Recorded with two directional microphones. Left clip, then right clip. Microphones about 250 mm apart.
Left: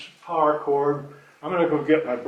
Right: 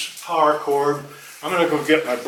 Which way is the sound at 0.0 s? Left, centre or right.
Centre.